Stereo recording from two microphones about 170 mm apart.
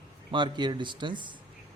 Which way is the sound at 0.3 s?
25° right (ahead or behind).